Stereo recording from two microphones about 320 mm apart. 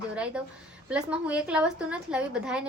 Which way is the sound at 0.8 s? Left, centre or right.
Centre.